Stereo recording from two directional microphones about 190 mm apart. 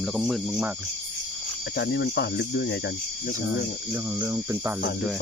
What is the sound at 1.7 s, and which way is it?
Speech, 65° left (ahead or behind).